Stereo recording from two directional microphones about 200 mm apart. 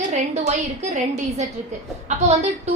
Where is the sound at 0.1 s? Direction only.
35° right (ahead or behind).